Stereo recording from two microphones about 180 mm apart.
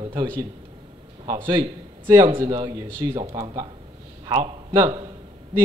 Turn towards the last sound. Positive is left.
turn(degrees=-25)  # may be behind; listen again after turning